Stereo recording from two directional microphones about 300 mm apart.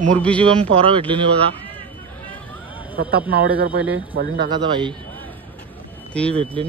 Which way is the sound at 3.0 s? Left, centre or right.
Right.